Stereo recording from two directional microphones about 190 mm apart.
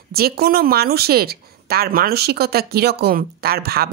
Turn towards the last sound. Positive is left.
turn(degrees=-55)  # may be behind; listen again after turning